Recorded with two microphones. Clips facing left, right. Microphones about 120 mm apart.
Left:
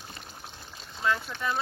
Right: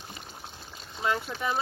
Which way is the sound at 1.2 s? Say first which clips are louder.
Right 1 dB; 10° right (ahead or behind).